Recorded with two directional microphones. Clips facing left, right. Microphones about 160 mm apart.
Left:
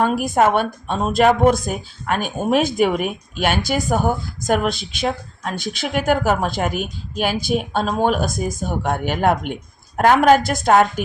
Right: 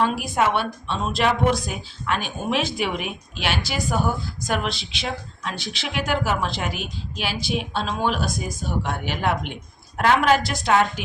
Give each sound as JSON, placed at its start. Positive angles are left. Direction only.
{"t": 0.0, "sound": "a woman's voice", "side_deg": 45}